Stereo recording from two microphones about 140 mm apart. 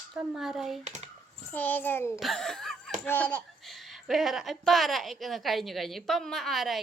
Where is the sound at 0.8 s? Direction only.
55° right (ahead or behind).